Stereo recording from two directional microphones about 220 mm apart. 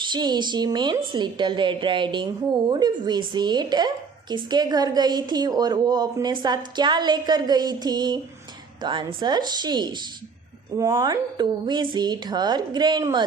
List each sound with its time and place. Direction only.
0.0 s a woman's voice: 20° right (ahead or behind)